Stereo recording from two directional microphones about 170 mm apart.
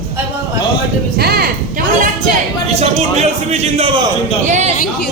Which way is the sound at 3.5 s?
40° right (ahead or behind).